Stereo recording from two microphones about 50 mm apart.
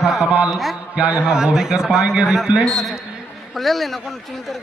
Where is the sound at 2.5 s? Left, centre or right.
Right.